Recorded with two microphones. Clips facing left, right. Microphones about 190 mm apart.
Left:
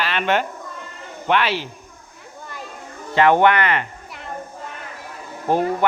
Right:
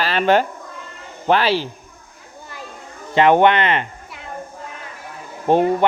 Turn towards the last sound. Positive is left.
turn(degrees=-25)  # may be behind; listen again after turning